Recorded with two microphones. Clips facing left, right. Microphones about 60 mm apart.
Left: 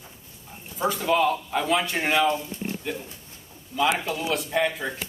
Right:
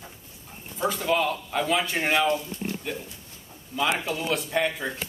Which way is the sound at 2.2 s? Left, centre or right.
Left.